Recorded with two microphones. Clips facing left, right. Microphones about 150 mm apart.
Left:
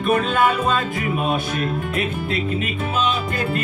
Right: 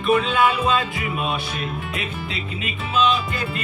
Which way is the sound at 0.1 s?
50° left (ahead or behind).